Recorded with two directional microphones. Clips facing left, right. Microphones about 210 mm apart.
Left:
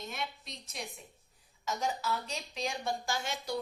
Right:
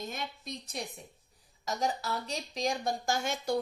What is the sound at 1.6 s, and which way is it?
Speech, 35° right (ahead or behind).